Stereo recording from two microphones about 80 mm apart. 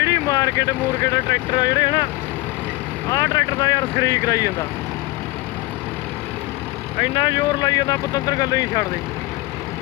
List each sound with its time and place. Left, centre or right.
0.0 s speech: left
3.1 s speech: left
7.0 s speech: left